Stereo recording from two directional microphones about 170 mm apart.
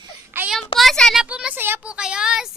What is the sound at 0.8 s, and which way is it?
Speech, centre (ahead or behind).